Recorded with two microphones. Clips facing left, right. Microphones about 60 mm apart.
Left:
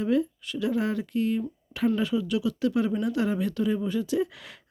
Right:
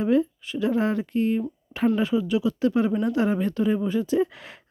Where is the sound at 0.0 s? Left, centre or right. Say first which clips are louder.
Right 3 dB; right.